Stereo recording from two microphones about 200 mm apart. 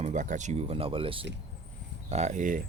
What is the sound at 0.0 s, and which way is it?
Speech, 40° right (ahead or behind).